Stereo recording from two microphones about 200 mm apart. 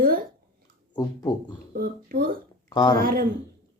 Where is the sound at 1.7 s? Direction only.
50° right (ahead or behind).